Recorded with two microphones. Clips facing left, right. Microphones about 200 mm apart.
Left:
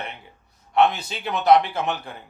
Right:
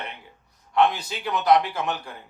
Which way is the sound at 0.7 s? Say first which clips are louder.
Left 2 dB; 25° left (ahead or behind).